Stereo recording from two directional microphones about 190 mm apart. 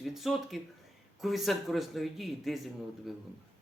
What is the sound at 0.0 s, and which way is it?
Speech, centre (ahead or behind).